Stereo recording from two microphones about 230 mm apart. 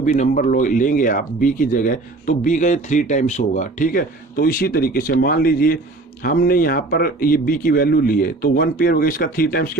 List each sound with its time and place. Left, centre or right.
0.0 s speech: left